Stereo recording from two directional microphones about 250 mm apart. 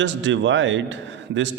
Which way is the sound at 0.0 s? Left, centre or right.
Right.